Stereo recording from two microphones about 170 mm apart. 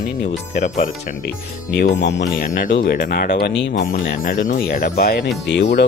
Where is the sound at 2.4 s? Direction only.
55° left (ahead or behind).